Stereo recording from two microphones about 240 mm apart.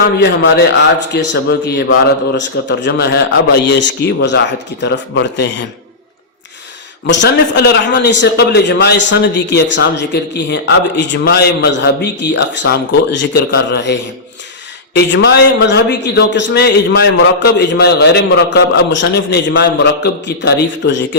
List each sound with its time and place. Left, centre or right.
1.1 s a man's voice: left
7.1 s a man's voice: left